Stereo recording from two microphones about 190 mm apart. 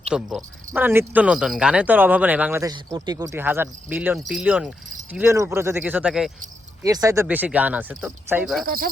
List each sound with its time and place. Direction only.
0.1 s speech: 5° right (ahead or behind)
4.3 s cricket: 5° right (ahead or behind)
5.1 s speech: 15° right (ahead or behind)
6.8 s speech: 20° right (ahead or behind)
8.6 s speech: 50° right (ahead or behind)